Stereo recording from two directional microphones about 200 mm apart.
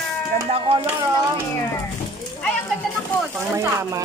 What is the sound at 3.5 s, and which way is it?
Speech, 15° right (ahead or behind).